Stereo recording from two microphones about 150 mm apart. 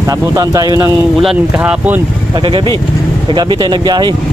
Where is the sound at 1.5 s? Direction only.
10° right (ahead or behind).